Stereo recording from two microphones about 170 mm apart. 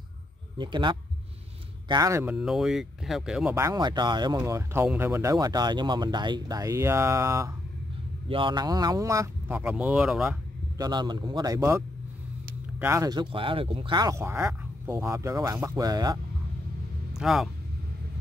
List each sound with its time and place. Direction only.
0.6 s speech: 30° right (ahead or behind)
2.3 s speech: centre (ahead or behind)
3.5 s speech: 20° right (ahead or behind)
4.4 s speech: 15° right (ahead or behind)
8.3 s speech: 30° right (ahead or behind); by 10.4 s 5° right (ahead or behind)
10.8 s speech: 25° right (ahead or behind)
12.8 s speech: 20° right (ahead or behind)
17.2 s speech: centre (ahead or behind)